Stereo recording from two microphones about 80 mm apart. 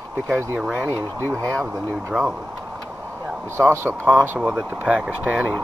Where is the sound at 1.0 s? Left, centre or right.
Right.